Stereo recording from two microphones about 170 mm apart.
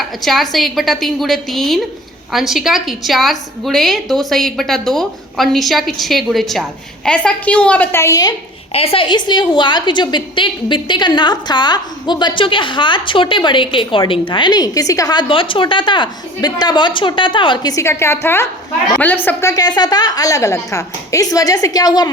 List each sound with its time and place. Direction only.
0.0 s a woman's voice: centre (ahead or behind); by 8.4 s 20° left (ahead or behind)
8.7 s a woman's voice: 35° left (ahead or behind)